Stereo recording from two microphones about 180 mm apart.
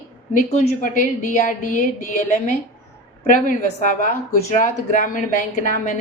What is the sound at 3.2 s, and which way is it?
A woman's voice, 45° left (ahead or behind).